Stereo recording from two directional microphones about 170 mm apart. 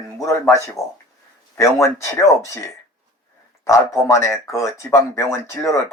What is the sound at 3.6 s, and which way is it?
Speech, 20° left (ahead or behind).